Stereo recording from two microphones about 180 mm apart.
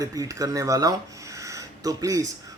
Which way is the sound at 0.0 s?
20° right (ahead or behind).